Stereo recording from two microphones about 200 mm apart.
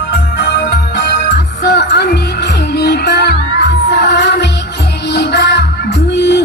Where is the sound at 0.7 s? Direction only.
60° left (ahead or behind).